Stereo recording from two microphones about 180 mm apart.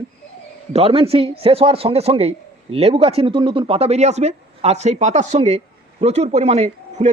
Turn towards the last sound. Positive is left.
turn(degrees=-35)  # may be behind; listen again after turning